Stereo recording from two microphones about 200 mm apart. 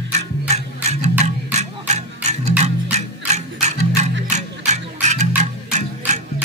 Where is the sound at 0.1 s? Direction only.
35° right (ahead or behind).